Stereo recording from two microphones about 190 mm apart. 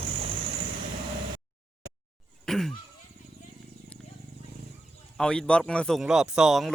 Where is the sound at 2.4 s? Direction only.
Centre (ahead or behind).